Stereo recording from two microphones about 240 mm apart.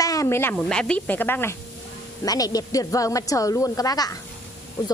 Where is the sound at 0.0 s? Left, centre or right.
Centre.